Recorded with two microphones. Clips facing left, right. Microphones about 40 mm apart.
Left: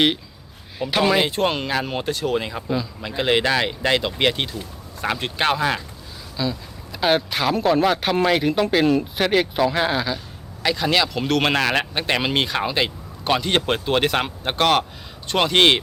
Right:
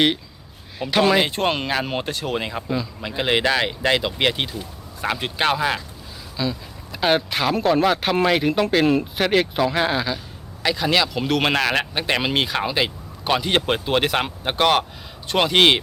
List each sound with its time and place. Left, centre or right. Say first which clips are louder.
0.9 s speech: right 1 dB; centre
1.3 s speech: even; right; by 2.6 s centre
3.0 s speech: even; centre